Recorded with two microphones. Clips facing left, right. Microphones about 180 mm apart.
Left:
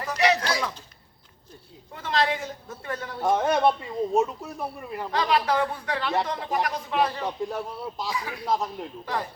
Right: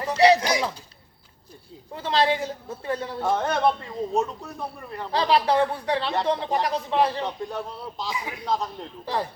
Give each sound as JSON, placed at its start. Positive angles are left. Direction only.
{"t": 0.0, "sound": "a sound", "side_deg": -30}
{"t": 0.4, "sound": "speech", "side_deg": -20}
{"t": 1.9, "sound": "a man's voice", "side_deg": -30}
{"t": 3.3, "sound": "a man's voice", "side_deg": 10}
{"t": 5.1, "sound": "a man's voice", "side_deg": -30}
{"t": 7.3, "sound": "a man's voice", "side_deg": 0}
{"t": 8.1, "sound": "a man's voice", "side_deg": -20}
{"t": 8.4, "sound": "a man's voice", "side_deg": 5}